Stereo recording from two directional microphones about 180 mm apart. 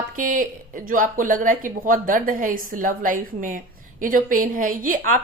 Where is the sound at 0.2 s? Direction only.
50° right (ahead or behind).